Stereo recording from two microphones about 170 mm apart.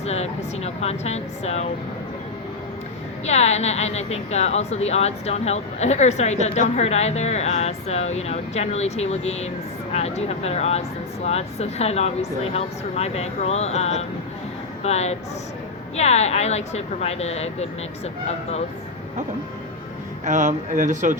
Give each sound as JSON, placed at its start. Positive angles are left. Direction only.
{"t": 0.0, "sound": "a woman's voice", "side_deg": 40}
{"t": 3.2, "sound": "a woman's voice", "side_deg": 40}
{"t": 20.2, "sound": "speech", "side_deg": -45}